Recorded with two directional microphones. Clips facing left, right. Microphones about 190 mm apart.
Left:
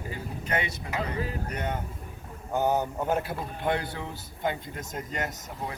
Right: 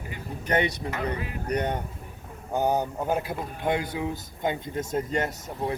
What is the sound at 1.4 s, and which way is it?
Speech, 35° right (ahead or behind).